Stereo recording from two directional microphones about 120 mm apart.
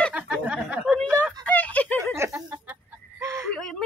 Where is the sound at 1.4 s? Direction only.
10° left (ahead or behind).